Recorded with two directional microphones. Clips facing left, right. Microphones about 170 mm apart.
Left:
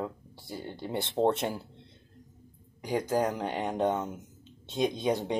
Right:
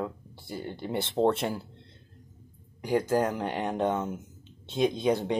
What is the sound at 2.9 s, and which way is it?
Speech, 15° left (ahead or behind).